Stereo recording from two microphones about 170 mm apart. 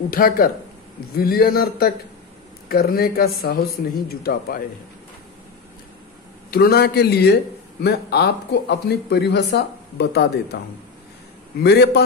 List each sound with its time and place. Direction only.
0.1 s a man's voice: 60° left (ahead or behind)
6.5 s speech: 65° left (ahead or behind)
11.6 s speech: 75° left (ahead or behind)